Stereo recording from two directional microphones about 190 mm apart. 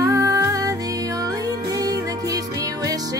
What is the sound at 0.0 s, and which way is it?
Music, 15° right (ahead or behind).